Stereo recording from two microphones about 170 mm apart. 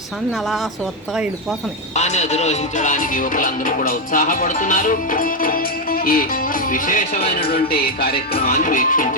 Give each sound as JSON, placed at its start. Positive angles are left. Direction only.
{"t": 1.1, "sound": "speech", "side_deg": -5}
{"t": 2.0, "sound": "music", "side_deg": 40}
{"t": 7.3, "sound": "speech", "side_deg": 65}
{"t": 8.3, "sound": "music", "side_deg": 60}